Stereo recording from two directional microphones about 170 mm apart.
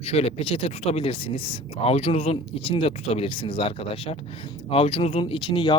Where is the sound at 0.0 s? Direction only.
35° left (ahead or behind).